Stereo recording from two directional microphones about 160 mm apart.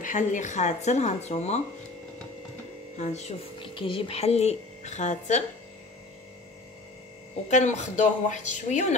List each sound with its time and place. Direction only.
0.0 s speech: 50° left (ahead or behind)
3.0 s speech: 45° left (ahead or behind)
7.4 s speech: 50° left (ahead or behind)